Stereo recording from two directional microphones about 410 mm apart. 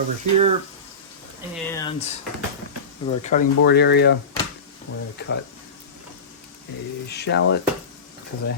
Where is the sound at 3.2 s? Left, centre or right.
Centre.